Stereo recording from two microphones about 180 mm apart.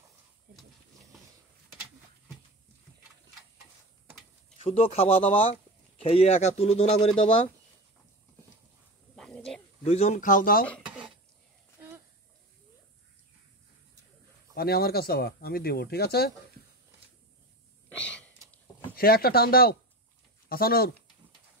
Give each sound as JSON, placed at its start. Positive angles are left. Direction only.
{"t": 4.6, "sound": "speech", "side_deg": 35}
{"t": 9.1, "sound": "a sound", "side_deg": 5}
{"t": 9.8, "sound": "speech", "side_deg": 40}
{"t": 14.5, "sound": "speech", "side_deg": 60}
{"t": 17.8, "sound": "gasp", "side_deg": 5}
{"t": 18.9, "sound": "speech", "side_deg": 55}